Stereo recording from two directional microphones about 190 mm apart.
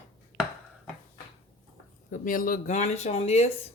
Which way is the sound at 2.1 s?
45° left (ahead or behind).